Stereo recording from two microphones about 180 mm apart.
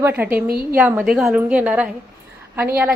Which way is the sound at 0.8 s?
5° right (ahead or behind).